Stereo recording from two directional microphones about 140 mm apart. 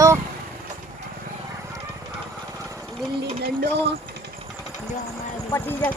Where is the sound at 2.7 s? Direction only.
5° left (ahead or behind).